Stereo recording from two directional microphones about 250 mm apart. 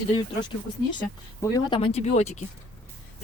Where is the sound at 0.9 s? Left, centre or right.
Centre.